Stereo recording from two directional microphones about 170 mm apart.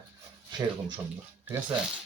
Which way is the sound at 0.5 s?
25° right (ahead or behind).